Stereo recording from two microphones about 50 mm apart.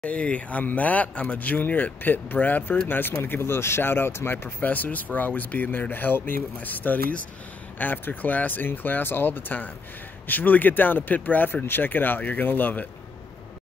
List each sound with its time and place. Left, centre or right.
0.0 s speech: left
4.6 s speech: left